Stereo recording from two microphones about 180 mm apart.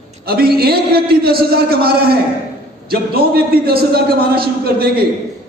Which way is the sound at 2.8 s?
60° right (ahead or behind).